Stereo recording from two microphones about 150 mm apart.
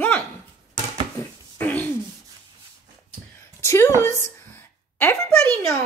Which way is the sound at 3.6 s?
20° left (ahead or behind).